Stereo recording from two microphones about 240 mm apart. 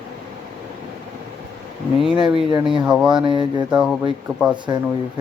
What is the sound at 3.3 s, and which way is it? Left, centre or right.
Speech, centre.